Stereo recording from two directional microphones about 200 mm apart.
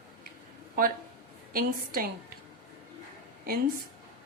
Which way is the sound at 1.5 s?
45° right (ahead or behind).